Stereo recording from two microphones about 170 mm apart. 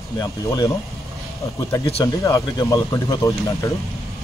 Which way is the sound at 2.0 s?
20° left (ahead or behind).